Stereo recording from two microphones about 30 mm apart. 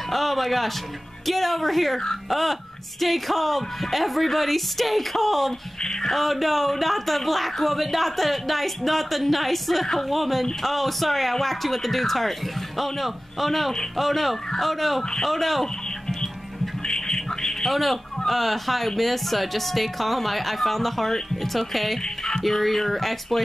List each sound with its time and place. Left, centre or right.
0.1 s a sound: centre
1.2 s speech: centre
5.8 s speech: left
6.0 s speech: centre
16.8 s music: left
17.6 s speech: centre
22.0 s music: left
22.4 s speech: centre